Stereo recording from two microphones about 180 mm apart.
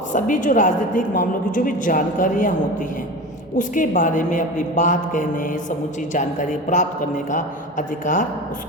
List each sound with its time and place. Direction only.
0.1 s a woman's voice: 45° left (ahead or behind)